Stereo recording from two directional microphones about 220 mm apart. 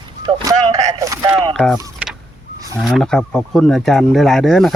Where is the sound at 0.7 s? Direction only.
30° right (ahead or behind).